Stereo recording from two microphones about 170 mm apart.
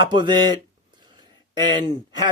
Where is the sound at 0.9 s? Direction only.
25° right (ahead or behind).